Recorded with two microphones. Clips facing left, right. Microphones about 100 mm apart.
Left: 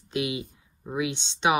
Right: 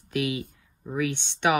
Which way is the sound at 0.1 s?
20° left (ahead or behind).